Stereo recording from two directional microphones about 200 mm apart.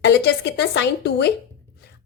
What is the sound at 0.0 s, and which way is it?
A woman's voice, 60° left (ahead or behind).